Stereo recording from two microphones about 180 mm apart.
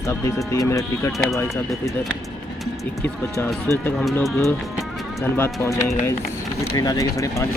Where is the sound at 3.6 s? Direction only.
15° left (ahead or behind).